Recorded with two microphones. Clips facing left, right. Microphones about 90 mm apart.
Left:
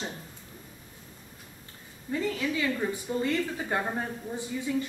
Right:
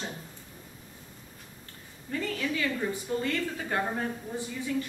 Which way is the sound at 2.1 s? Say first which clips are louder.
Left 2 dB; 15° left (ahead or behind).